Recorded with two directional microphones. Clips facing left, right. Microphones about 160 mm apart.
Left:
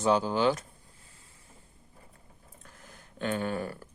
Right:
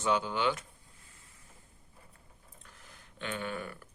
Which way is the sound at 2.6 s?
45° left (ahead or behind).